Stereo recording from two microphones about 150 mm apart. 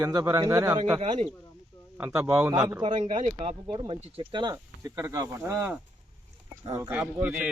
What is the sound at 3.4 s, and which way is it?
Speech, 40° right (ahead or behind).